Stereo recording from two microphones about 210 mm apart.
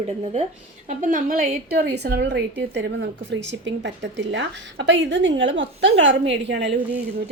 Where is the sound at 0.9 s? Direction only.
40° right (ahead or behind); by 6.7 s 55° right (ahead or behind).